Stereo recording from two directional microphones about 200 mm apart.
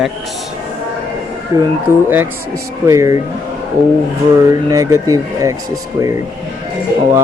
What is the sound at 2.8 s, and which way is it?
Speech, 15° right (ahead or behind).